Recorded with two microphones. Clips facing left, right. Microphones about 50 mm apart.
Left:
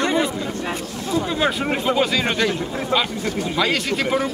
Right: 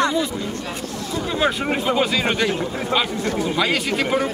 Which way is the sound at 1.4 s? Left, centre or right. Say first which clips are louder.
Even; centre.